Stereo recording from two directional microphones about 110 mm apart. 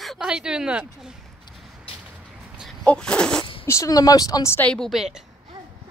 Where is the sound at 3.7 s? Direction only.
30° left (ahead or behind).